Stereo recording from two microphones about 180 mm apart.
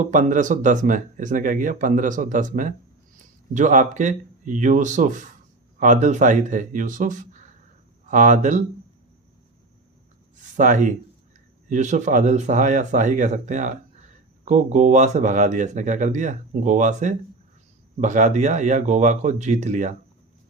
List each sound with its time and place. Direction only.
0.0 s speech: 45° right (ahead or behind)
10.6 s speech: 45° right (ahead or behind)